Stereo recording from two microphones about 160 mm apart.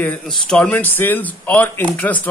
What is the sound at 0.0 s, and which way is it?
A man's voice, 5° left (ahead or behind).